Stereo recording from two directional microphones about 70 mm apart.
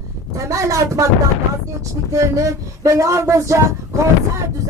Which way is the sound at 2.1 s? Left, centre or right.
Right.